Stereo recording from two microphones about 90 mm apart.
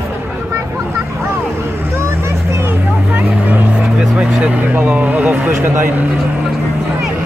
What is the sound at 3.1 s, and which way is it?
Vehicle, 20° right (ahead or behind).